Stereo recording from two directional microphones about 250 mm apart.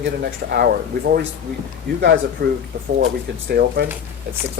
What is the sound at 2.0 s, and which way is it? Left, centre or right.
Speech, right.